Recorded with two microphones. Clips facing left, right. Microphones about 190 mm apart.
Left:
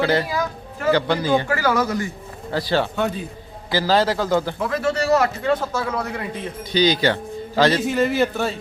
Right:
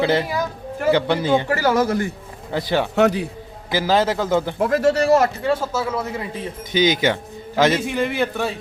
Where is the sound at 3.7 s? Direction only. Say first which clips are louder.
Even; 20° right (ahead or behind).